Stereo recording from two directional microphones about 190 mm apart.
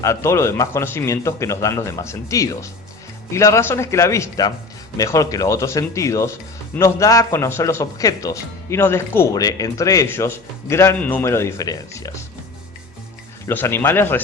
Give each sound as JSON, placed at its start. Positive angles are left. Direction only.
{"t": 0.0, "sound": "speech", "side_deg": 15}
{"t": 13.5, "sound": "speech", "side_deg": 10}